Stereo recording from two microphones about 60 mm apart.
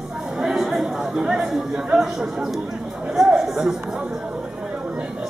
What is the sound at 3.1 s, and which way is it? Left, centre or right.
Chatter, centre.